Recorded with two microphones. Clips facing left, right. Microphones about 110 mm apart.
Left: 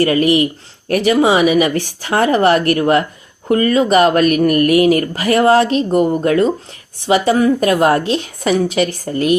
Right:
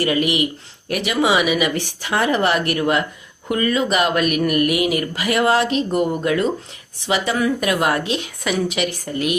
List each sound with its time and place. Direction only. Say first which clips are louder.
0.0 s speech: left 6 dB; 40° left (ahead or behind)